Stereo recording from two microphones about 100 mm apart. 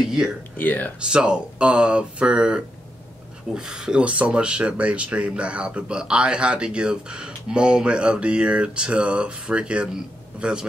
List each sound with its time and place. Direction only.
0.0 s a sound: 5° right (ahead or behind)
0.6 s speech: 15° left (ahead or behind)
0.9 s speech: 10° right (ahead or behind)